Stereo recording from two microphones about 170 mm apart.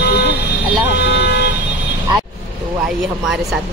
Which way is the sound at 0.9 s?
90° left.